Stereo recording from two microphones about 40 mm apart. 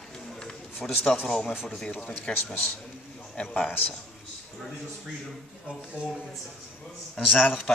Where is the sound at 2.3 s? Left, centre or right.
Left.